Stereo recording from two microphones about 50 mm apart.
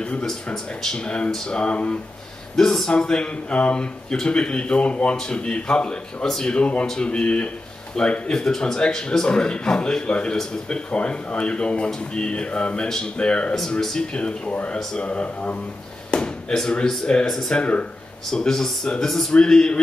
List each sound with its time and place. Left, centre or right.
0.8 s speech: centre
2.5 s speech: centre
6.5 s speech: left
17.6 s speech: left
18.3 s speech: centre